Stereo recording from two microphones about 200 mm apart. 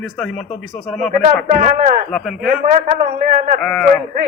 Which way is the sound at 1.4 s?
40° right (ahead or behind).